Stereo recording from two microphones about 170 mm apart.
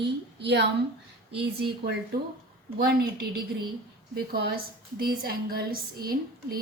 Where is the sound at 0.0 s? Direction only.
80° right.